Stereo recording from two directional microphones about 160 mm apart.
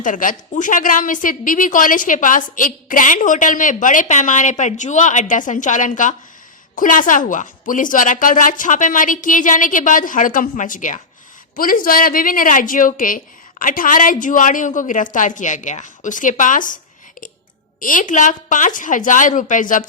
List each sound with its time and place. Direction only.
0.0 s a woman's voice: 55° left (ahead or behind)
17.7 s a woman's voice: 55° left (ahead or behind)